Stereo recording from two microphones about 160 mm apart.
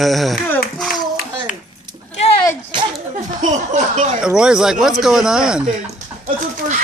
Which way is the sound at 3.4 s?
50° right (ahead or behind).